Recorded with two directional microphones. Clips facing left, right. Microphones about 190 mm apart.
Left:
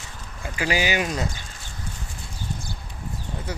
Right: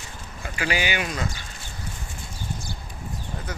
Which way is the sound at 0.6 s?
35° left (ahead or behind).